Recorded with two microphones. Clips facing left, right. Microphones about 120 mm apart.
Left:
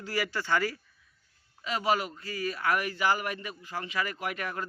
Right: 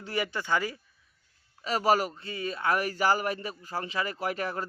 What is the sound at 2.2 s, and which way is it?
Speech, 25° right (ahead or behind).